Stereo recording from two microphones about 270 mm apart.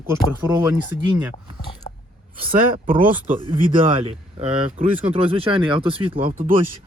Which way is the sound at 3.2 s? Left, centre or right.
Right.